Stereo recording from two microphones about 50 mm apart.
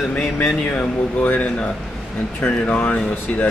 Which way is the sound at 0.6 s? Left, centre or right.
Left.